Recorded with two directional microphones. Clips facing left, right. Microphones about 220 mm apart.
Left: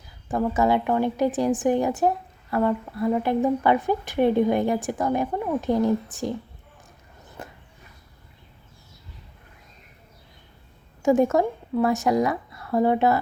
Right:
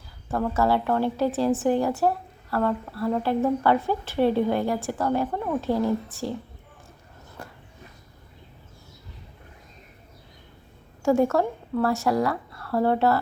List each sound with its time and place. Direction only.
0.3 s a woman's voice: 15° left (ahead or behind)
7.4 s a sound: 20° left (ahead or behind)
11.0 s speech: 20° left (ahead or behind)